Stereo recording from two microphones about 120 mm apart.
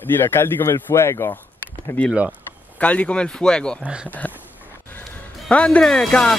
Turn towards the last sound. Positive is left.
turn(degrees=10)  # may be behind; listen again after turning